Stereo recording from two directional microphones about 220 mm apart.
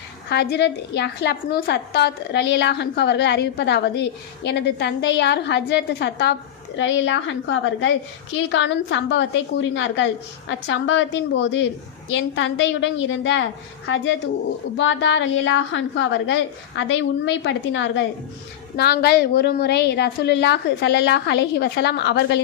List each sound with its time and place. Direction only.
0.3 s a woman's voice: 50° left (ahead or behind)